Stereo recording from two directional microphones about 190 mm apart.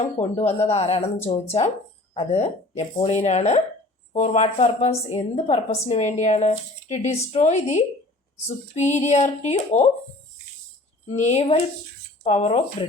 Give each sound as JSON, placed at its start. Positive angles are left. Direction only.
{"t": 0.2, "sound": "a woman's voice", "side_deg": 35}
{"t": 11.0, "sound": "a woman's voice", "side_deg": 35}